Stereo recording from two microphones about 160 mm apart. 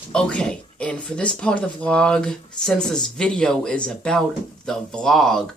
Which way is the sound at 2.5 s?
5° left (ahead or behind).